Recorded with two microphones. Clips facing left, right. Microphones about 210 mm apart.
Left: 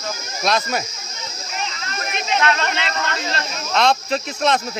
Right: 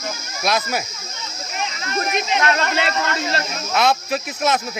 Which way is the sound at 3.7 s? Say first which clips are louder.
Left 1 dB; 5° right (ahead or behind).